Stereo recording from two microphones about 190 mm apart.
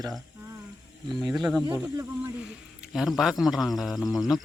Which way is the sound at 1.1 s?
Centre (ahead or behind).